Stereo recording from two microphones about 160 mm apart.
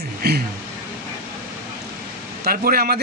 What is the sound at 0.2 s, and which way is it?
Speech, 80° right.